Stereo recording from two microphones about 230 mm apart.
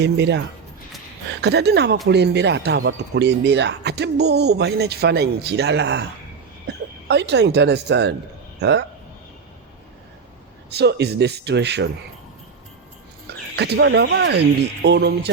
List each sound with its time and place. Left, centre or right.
0.0 s speech: right
7.1 s speech: right
10.7 s speech: right
13.2 s speech: right